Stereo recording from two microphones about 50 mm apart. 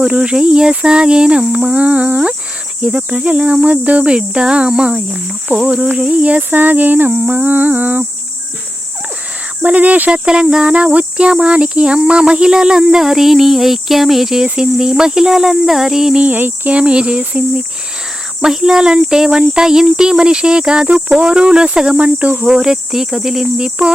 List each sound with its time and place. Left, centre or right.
0.0 s cricket: centre; by 8.0 s right
9.6 s cricket: right
10.1 s speech: centre
16.2 s cricket: right
16.7 s cricket: right
18.4 s speech: centre
20.8 s cricket: right
22.4 s speech: centre